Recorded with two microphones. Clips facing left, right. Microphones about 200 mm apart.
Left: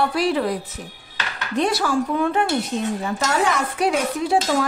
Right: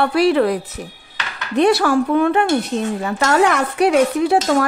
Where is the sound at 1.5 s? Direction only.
65° right (ahead or behind).